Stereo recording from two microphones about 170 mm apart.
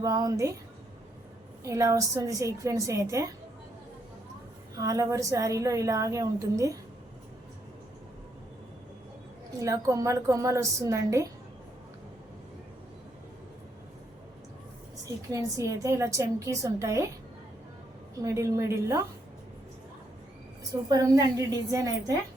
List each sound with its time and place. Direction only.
0.0 s a woman's voice: 20° right (ahead or behind)
1.6 s a woman's voice: 20° right (ahead or behind)
4.8 s a woman's voice: 20° right (ahead or behind)
9.6 s a woman's voice: 20° right (ahead or behind)
15.3 s a woman's voice: 20° right (ahead or behind)
18.2 s a woman's voice: 20° right (ahead or behind)
20.9 s a woman's voice: 20° right (ahead or behind)